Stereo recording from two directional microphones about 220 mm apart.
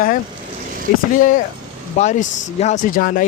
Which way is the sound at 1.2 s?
35° left (ahead or behind).